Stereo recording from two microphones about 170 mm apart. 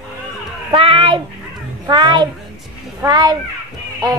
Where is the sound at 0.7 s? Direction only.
30° right (ahead or behind).